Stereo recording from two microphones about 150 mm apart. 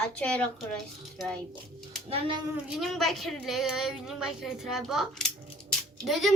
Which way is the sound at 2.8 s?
Centre (ahead or behind).